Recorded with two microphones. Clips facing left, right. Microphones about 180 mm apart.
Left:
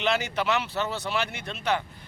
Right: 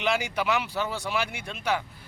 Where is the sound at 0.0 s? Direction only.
10° right (ahead or behind).